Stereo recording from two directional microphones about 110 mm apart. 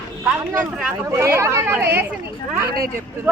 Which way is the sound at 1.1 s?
25° right (ahead or behind).